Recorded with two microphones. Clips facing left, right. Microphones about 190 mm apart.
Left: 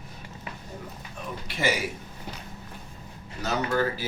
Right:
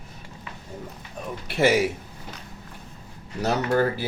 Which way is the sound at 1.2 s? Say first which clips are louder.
Right 4 dB; 40° right (ahead or behind).